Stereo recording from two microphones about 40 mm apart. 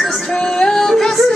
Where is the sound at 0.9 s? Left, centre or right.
Centre.